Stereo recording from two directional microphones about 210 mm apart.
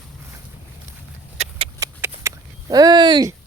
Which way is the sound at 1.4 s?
25° right (ahead or behind).